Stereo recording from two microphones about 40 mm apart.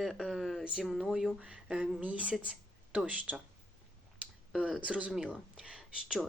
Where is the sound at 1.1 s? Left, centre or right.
Centre.